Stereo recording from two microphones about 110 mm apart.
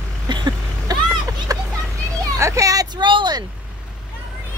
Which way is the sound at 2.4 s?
30° right (ahead or behind).